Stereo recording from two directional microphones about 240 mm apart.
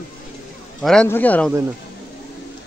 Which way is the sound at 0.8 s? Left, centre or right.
Centre.